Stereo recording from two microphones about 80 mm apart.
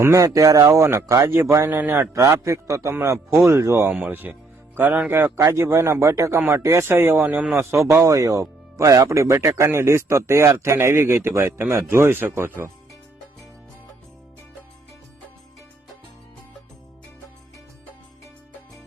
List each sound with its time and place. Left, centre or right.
0.0 s speech: right
2.2 s speech: right
3.8 s speech: centre